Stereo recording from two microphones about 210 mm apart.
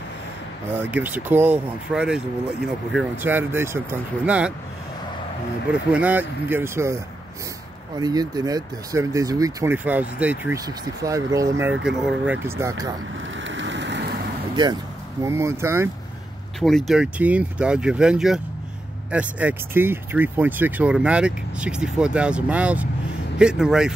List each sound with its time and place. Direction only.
0.7 s speech: 10° right (ahead or behind)
5.7 s speech: 5° right (ahead or behind)
8.0 s speech: 20° right (ahead or behind)
11.8 s speech: 5° right (ahead or behind)
13.4 s vehicle: 60° right (ahead or behind)
14.5 s speech: 20° right (ahead or behind)
16.5 s speech: centre (ahead or behind)